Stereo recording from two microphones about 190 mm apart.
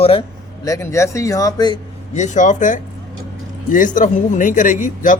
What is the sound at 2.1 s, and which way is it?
A man's voice, 40° left (ahead or behind).